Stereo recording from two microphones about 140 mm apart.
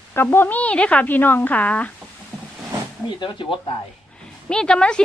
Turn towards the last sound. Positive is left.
turn(degrees=5)  # may be behind; listen again after turning